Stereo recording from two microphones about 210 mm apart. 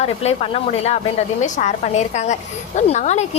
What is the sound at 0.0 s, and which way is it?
A woman's voice, 30° left (ahead or behind).